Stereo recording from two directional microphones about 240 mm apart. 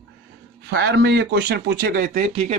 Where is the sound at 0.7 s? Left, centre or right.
Right.